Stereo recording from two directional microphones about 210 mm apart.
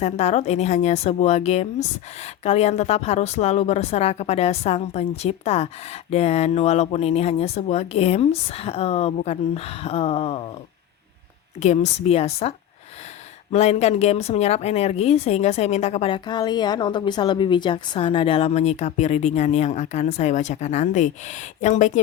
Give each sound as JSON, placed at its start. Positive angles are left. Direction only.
{"t": 0.0, "sound": "speech", "side_deg": 30}
{"t": 11.6, "sound": "speech", "side_deg": 35}